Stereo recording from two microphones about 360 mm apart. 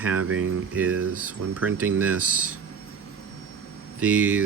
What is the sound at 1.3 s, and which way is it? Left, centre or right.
Speech, centre.